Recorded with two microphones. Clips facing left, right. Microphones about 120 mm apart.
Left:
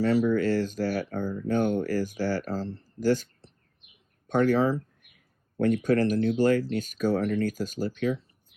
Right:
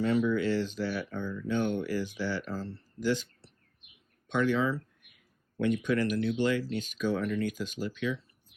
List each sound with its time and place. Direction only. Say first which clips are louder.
0.3 s speech: left 4 dB; 45° left (ahead or behind)
3.0 s speech: left 5 dB; 45° left (ahead or behind)
4.3 s speech: left 5 dB; 40° left (ahead or behind)